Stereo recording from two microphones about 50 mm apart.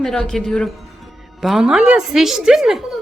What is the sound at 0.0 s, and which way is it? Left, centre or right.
Speech, centre.